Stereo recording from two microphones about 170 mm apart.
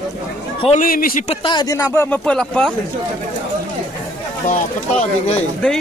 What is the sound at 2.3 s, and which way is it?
Speech, 5° left (ahead or behind).